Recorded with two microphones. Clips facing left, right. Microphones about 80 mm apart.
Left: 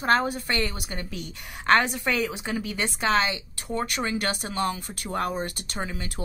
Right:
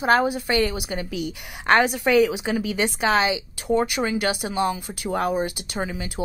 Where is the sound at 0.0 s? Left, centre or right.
Centre.